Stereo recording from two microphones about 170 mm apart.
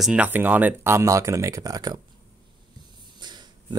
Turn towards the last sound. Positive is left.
turn(degrees=-25)  # may be behind; listen again after turning